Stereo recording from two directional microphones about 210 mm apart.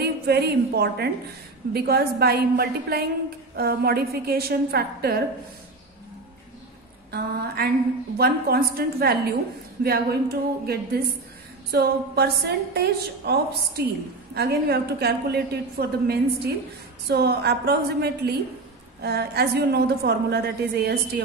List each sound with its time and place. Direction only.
0.0 s a woman's voice: 50° right (ahead or behind)
7.1 s a woman's voice: 50° right (ahead or behind)